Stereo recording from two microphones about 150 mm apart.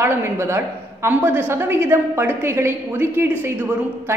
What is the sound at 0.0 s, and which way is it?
A woman's voice, 15° right (ahead or behind).